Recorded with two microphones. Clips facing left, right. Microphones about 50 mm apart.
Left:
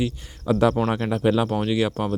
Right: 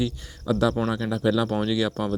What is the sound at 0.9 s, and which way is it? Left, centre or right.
Speech, left.